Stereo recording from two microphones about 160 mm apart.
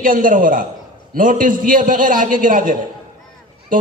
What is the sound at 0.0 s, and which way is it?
A man's voice, 60° right (ahead or behind).